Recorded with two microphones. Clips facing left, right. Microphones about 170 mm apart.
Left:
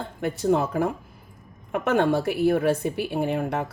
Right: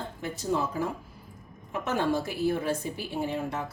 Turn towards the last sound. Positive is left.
turn(degrees=60)  # may be behind; listen again after turning